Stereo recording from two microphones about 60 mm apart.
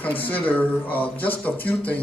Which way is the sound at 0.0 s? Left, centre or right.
Left.